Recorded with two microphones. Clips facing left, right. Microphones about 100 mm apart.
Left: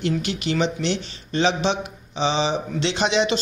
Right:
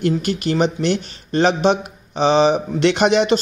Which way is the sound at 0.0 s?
45° right (ahead or behind).